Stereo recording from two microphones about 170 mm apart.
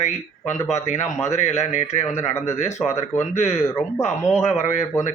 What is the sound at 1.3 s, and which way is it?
Speech, 40° left (ahead or behind).